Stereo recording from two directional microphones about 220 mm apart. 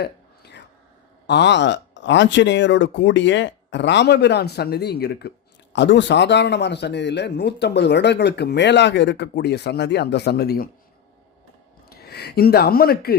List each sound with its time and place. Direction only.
0.0 s a sound: 50° left (ahead or behind)
1.3 s a man's voice: 50° left (ahead or behind)
11.9 s speech: 50° left (ahead or behind)